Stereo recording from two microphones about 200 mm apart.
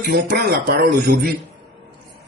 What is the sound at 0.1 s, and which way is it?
A man's voice, 50° right (ahead or behind).